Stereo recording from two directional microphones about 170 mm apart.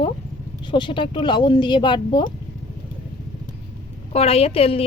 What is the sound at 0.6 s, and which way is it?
Speech, 30° left (ahead or behind).